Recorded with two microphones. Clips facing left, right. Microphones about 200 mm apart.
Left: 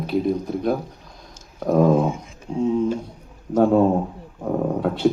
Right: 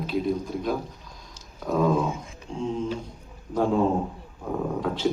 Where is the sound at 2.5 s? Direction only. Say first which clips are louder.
Left 8 dB; 40° left (ahead or behind).